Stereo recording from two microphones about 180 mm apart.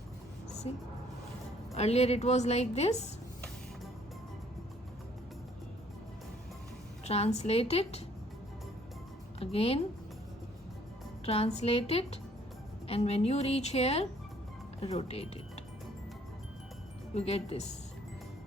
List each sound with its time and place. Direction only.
0.7 s a woman's voice: 30° left (ahead or behind)
7.0 s a woman's voice: 35° left (ahead or behind)
9.4 s a woman's voice: 35° left (ahead or behind)
11.3 s a woman's voice: 35° left (ahead or behind)
17.2 s a woman's voice: 35° left (ahead or behind)